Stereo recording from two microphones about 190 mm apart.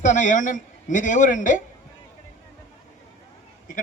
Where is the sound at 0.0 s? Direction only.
40° left (ahead or behind).